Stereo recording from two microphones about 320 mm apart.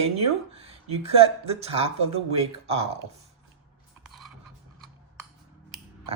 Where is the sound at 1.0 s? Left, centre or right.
Centre.